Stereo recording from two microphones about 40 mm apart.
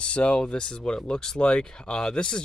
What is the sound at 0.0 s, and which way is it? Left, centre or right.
Speech, left.